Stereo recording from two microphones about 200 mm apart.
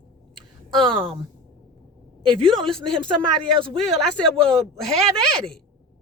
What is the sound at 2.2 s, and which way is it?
Speech, 25° right (ahead or behind).